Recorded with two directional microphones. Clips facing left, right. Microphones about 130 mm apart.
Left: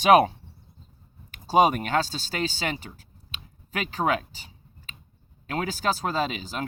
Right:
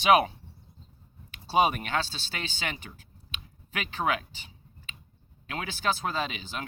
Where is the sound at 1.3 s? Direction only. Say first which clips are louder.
Left 4 dB; 45° left (ahead or behind).